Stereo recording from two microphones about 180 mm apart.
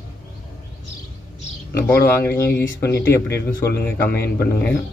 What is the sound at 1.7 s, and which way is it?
Speech, 15° left (ahead or behind).